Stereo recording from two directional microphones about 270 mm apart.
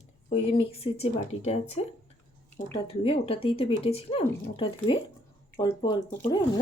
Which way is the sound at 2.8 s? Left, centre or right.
Left.